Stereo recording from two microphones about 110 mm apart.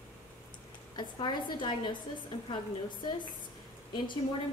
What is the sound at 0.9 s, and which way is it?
A woman's voice, 45° left (ahead or behind).